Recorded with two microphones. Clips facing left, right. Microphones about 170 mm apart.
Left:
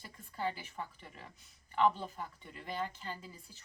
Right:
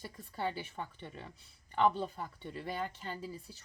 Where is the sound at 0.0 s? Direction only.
35° right (ahead or behind).